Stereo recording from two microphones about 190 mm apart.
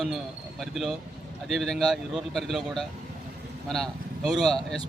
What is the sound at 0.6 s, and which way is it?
Speech, centre (ahead or behind).